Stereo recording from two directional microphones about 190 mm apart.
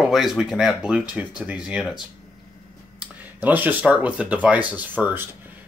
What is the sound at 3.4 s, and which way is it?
Speech, 10° right (ahead or behind).